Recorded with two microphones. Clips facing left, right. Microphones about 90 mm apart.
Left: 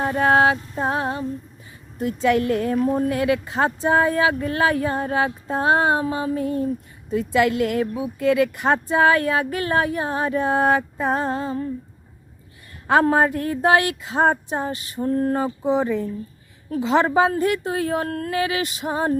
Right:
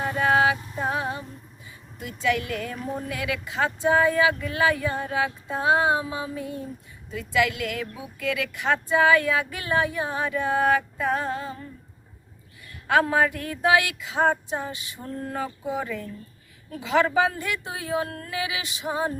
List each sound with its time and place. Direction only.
0.2 s music: 40° left (ahead or behind)
2.0 s speech: 40° left (ahead or behind)
7.1 s speech: 35° left (ahead or behind)
12.9 s speech: 35° left (ahead or behind)
15.4 s a woman's voice: 25° left (ahead or behind); by 19.1 s 45° left (ahead or behind)